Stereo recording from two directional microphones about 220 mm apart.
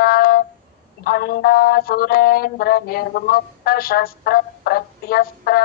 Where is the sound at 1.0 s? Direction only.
45° left (ahead or behind).